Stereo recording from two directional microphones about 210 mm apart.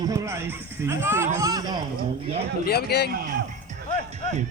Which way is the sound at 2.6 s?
50° left (ahead or behind).